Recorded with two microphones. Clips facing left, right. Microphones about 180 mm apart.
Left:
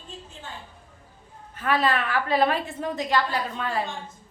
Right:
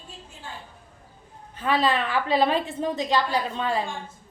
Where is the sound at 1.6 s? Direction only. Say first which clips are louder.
Right 1 dB; 20° right (ahead or behind).